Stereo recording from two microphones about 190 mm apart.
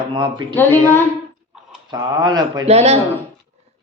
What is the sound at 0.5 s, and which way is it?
Speech, 10° left (ahead or behind).